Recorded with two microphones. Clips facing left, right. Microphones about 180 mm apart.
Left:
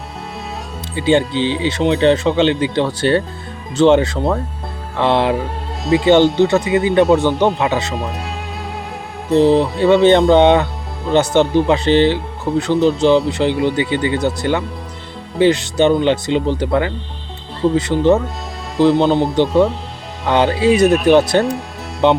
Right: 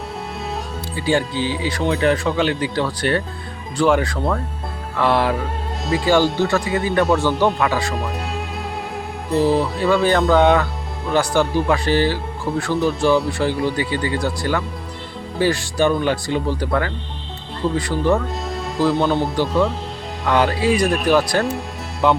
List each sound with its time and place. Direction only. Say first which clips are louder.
0.9 s speech: left 5 dB; 20° left (ahead or behind)
9.3 s speech: left 5 dB; 20° left (ahead or behind)